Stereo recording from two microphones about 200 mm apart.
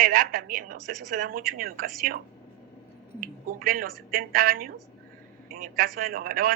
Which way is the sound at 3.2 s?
45° right (ahead or behind).